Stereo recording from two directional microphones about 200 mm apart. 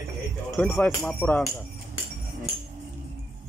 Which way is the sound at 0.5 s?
5° left (ahead or behind).